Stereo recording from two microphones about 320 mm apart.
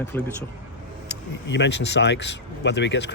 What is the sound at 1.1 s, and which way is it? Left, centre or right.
Speech, left.